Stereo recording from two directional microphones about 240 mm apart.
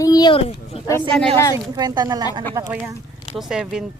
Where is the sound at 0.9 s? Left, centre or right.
Centre.